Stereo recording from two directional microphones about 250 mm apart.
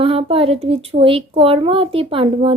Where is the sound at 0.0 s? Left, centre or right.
Right.